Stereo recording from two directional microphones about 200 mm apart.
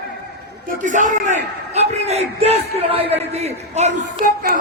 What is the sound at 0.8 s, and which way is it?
A man's voice, 40° right (ahead or behind).